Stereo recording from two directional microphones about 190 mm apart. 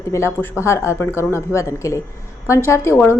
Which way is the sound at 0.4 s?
15° left (ahead or behind).